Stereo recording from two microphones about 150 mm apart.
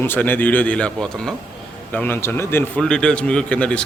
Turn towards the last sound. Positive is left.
turn(degrees=10)  # may be behind; listen again after turning